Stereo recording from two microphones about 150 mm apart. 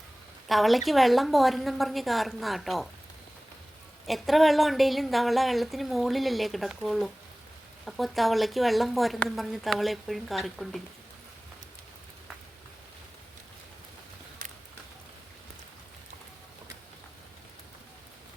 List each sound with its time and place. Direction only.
0.4 s a woman's voice: centre (ahead or behind)
4.0 s a woman's voice: centre (ahead or behind)